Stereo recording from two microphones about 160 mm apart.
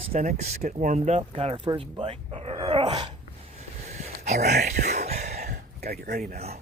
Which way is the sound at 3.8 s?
45° right (ahead or behind).